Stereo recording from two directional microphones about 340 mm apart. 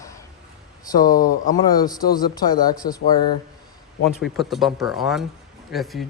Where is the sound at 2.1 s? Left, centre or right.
Centre.